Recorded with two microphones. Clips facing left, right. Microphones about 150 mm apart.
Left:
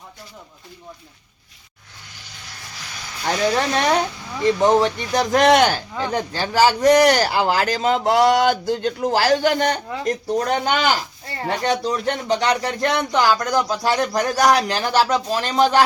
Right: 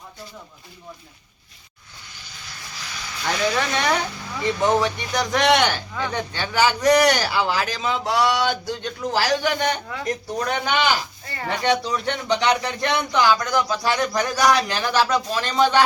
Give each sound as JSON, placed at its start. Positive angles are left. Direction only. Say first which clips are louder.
{"t": 2.9, "sound": "speech", "louder": "left 3 dB", "side_deg": 35}
{"t": 7.2, "sound": "speech", "louder": "left 4 dB", "side_deg": 45}